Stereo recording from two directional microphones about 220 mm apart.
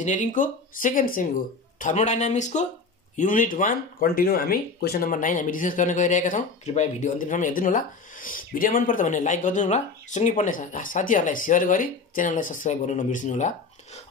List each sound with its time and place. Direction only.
0.0 s speech: 35° left (ahead or behind)